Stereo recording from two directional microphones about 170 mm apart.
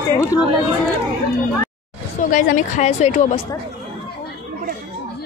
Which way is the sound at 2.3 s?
50° left (ahead or behind).